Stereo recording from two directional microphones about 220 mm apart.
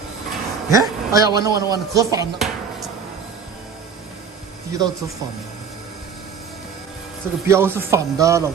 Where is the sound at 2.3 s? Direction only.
Centre (ahead or behind).